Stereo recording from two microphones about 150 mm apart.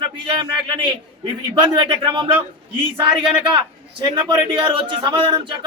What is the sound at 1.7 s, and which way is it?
Speech, 30° right (ahead or behind).